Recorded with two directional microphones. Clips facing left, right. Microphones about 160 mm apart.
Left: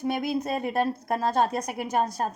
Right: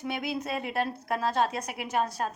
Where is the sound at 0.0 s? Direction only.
45° left (ahead or behind).